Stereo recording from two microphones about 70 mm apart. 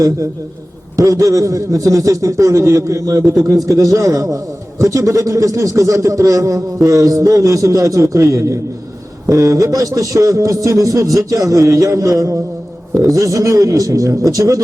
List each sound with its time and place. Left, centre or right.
0.9 s a man's voice: right